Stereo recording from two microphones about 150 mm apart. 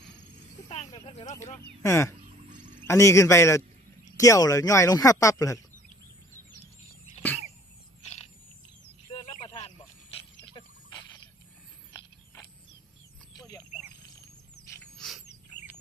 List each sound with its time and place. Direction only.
0.7 s speech: 45° left (ahead or behind)
1.8 s speech: 20° left (ahead or behind)
9.5 s a sound: 40° left (ahead or behind)
14.9 s bird: centre (ahead or behind)